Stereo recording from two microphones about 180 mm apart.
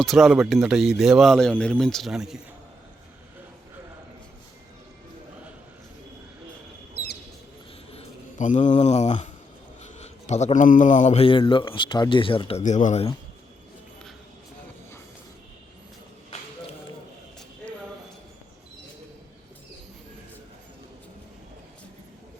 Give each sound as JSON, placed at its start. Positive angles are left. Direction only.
{"t": 0.0, "sound": "speech", "side_deg": 0}
{"t": 6.9, "sound": "a sound", "side_deg": 60}
{"t": 7.9, "sound": "speech", "side_deg": 40}